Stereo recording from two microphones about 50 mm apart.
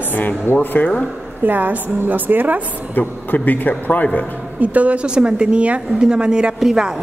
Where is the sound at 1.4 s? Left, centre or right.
Right.